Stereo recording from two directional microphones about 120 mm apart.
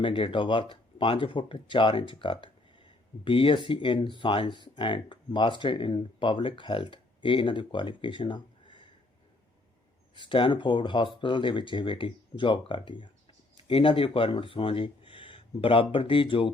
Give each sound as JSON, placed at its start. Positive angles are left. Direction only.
{"t": 0.0, "sound": "speech", "side_deg": 45}
{"t": 10.2, "sound": "speech", "side_deg": 45}